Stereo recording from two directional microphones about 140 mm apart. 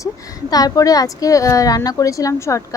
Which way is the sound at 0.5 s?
25° left (ahead or behind).